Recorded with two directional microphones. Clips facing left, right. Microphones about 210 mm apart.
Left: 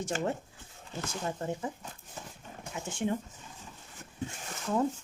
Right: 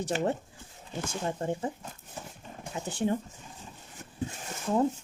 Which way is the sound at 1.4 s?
30° right (ahead or behind).